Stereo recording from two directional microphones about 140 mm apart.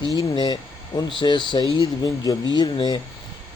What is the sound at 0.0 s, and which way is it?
Speech, 30° left (ahead or behind).